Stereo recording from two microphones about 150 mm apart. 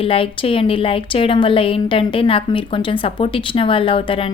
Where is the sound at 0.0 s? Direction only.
40° left (ahead or behind).